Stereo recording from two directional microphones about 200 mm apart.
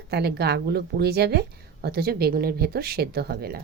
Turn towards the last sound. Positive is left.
turn(degrees=-50)  # may be behind; listen again after turning